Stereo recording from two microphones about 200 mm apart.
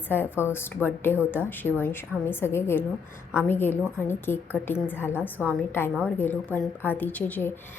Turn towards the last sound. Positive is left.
turn(degrees=10)  # may be behind; listen again after turning